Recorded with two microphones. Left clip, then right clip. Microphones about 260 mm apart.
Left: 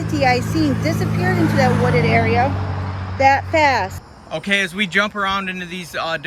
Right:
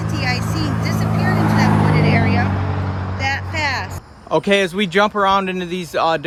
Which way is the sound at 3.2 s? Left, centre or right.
Centre.